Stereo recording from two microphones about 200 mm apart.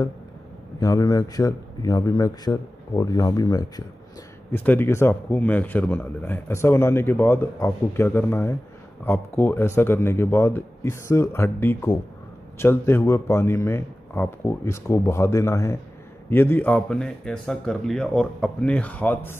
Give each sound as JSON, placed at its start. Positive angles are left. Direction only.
{"t": 0.7, "sound": "a man's voice", "side_deg": 15}